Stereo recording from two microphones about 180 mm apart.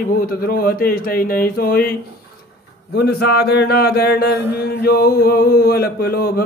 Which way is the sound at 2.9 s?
65° left (ahead or behind).